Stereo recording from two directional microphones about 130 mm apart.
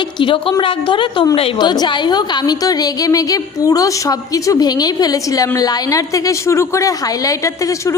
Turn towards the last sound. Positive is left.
turn(degrees=25)  # may be behind; listen again after turning